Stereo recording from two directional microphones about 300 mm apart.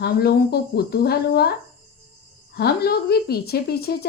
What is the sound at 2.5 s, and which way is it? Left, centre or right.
Speech, left.